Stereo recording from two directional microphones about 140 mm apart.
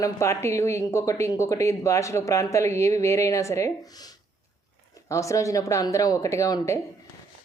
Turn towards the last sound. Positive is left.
turn(degrees=25)  # may be behind; listen again after turning